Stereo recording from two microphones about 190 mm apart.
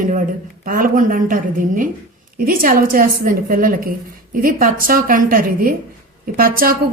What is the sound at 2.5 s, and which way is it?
A woman's voice, 50° right (ahead or behind).